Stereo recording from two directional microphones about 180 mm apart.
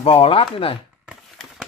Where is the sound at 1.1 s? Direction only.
5° right (ahead or behind).